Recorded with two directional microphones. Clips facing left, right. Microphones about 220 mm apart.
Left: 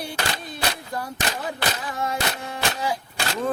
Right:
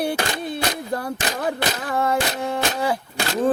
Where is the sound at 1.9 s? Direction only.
60° right (ahead or behind).